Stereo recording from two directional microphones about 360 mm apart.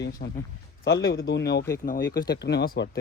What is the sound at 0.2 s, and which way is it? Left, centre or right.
Speech, left.